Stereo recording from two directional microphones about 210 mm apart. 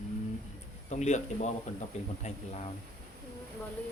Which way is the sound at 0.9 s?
35° left (ahead or behind).